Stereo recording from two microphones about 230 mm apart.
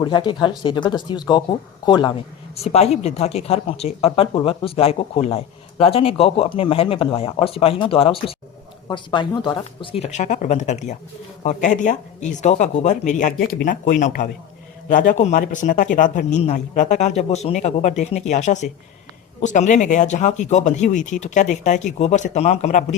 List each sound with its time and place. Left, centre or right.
0.0 s speech: centre
10.0 s speech: left